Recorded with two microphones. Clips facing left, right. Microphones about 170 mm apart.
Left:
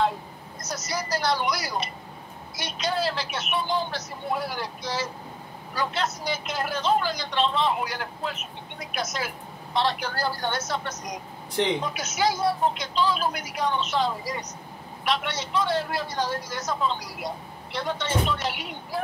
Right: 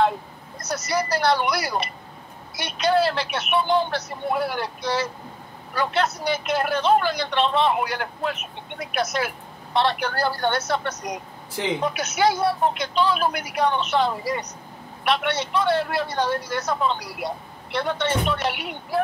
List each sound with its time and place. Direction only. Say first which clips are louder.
0.6 s speech: right 7 dB; 65° right (ahead or behind)